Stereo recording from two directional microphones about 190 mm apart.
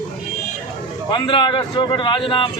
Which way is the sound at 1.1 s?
25° left (ahead or behind).